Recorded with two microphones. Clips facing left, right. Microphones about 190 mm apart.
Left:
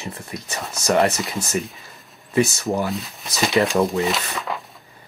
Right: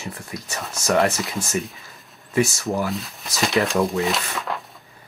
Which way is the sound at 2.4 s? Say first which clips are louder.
Left 1 dB; centre (ahead or behind).